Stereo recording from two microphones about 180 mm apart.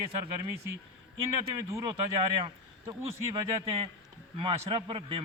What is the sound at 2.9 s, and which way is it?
Speech, 30° right (ahead or behind).